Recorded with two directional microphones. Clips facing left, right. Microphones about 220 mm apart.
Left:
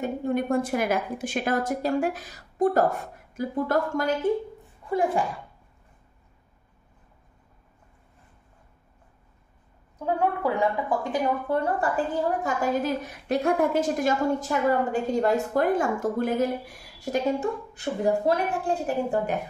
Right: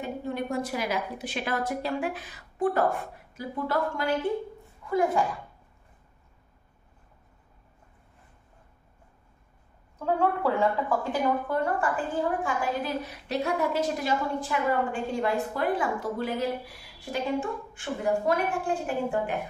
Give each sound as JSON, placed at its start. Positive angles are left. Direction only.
{"t": 0.0, "sound": "a woman's voice", "side_deg": 50}
{"t": 4.8, "sound": "a sound", "side_deg": 30}
{"t": 9.9, "sound": "a woman's voice", "side_deg": 15}
{"t": 11.4, "sound": "a woman's voice", "side_deg": 35}